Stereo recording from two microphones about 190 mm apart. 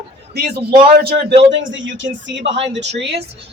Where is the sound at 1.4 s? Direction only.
75° right (ahead or behind).